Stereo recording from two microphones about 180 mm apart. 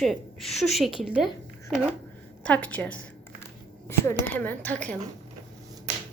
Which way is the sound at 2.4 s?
5° left (ahead or behind).